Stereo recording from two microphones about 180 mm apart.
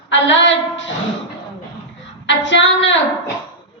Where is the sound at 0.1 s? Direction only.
90° left.